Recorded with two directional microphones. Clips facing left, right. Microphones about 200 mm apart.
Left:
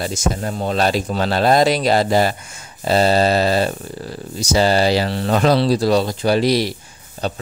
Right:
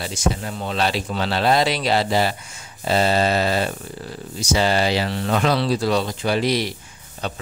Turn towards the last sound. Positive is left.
turn(degrees=35)  # may be behind; listen again after turning